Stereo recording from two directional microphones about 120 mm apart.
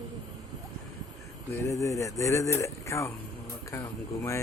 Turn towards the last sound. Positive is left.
turn(degrees=25)  # may be behind; listen again after turning